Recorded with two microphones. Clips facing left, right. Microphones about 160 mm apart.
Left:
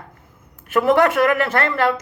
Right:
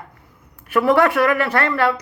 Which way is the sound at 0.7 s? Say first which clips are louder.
Even; 45° left (ahead or behind).